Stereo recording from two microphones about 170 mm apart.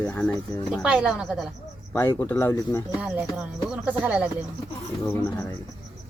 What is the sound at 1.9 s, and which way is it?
Speech, 15° left (ahead or behind).